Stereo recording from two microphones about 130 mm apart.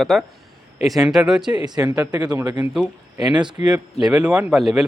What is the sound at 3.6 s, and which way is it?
Speech, 60° left (ahead or behind).